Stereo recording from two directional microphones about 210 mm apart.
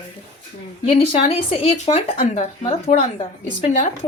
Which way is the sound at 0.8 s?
25° left (ahead or behind).